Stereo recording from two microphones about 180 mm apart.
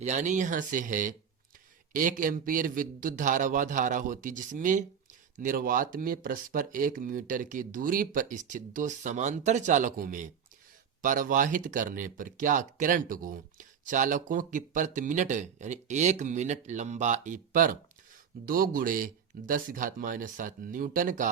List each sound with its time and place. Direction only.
0.0 s speech: 40° right (ahead or behind)